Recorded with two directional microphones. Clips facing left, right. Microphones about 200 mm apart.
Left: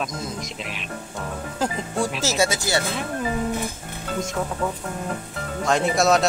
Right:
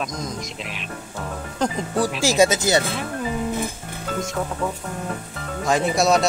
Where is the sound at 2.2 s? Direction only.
15° right (ahead or behind).